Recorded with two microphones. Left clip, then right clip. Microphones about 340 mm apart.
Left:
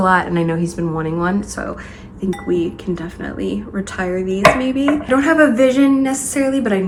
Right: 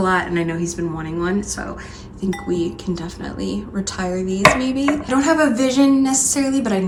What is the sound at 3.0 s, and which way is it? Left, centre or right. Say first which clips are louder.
Chopping: left 3 dB; centre.